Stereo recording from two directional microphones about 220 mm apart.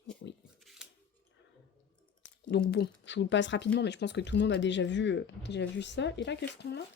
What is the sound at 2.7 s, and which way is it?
Speech, 50° left (ahead or behind).